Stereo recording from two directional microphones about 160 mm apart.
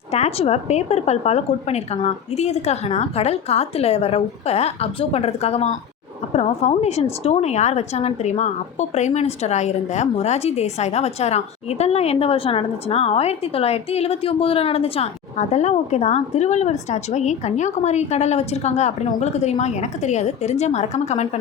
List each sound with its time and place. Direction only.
0.1 s a woman's voice: 40° left (ahead or behind)